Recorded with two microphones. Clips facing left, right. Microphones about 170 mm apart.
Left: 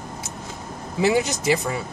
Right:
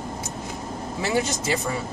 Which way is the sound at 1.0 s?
15° left (ahead or behind).